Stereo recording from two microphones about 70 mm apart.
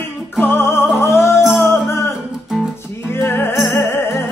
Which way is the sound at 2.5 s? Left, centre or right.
Centre.